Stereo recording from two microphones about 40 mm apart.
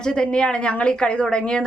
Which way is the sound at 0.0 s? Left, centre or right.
Left.